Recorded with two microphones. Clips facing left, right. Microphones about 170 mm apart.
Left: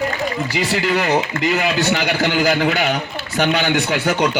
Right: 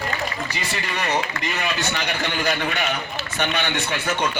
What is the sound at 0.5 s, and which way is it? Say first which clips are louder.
A man's voice: left 10 dB; 90° left.